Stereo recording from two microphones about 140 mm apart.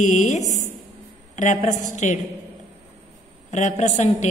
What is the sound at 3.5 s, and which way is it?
Speech, 55° left (ahead or behind).